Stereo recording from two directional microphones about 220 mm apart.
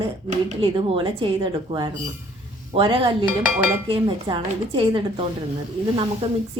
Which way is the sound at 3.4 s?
5° right (ahead or behind).